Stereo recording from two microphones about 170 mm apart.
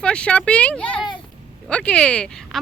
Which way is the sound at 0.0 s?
5° left (ahead or behind).